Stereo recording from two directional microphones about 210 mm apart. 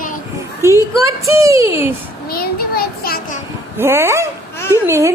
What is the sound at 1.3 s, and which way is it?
Speech, 15° right (ahead or behind).